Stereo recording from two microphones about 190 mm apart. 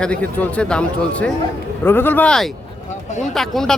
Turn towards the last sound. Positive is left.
turn(degrees=0)  # may be behind; listen again after turning